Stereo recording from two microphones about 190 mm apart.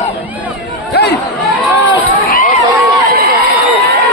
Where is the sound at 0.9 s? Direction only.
60° left (ahead or behind).